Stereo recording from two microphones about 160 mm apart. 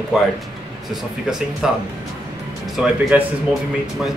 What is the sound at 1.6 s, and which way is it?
Speech, 5° right (ahead or behind).